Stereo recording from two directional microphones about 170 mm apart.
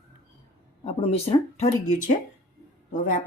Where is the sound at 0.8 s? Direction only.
35° left (ahead or behind).